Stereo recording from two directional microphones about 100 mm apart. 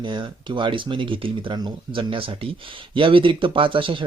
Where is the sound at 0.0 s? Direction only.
50° right (ahead or behind).